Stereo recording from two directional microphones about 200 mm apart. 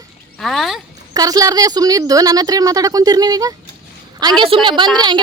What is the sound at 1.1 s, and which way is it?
A woman's voice, 20° right (ahead or behind).